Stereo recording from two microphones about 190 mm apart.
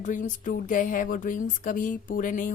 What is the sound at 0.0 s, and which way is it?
A woman's voice, 40° left (ahead or behind).